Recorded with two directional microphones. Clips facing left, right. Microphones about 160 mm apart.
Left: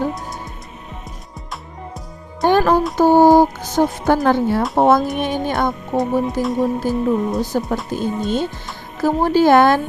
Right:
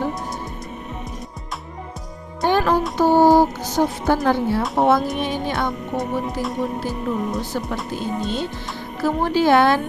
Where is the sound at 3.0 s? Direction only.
45° left (ahead or behind).